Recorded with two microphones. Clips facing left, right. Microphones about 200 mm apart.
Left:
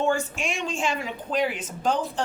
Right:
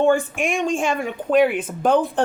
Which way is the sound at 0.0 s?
55° right (ahead or behind).